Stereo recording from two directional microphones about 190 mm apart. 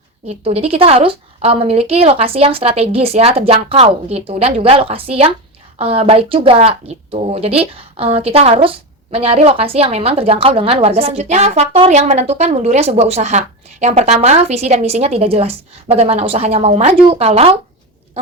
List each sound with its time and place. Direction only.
0.3 s a woman's voice: 35° right (ahead or behind)